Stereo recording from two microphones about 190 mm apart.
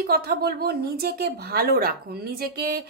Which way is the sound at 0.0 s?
55° right (ahead or behind).